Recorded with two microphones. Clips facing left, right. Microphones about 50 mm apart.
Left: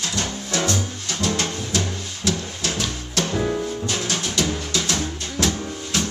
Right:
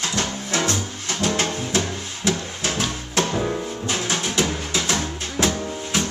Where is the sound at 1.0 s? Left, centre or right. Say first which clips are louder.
Right 3 dB; right.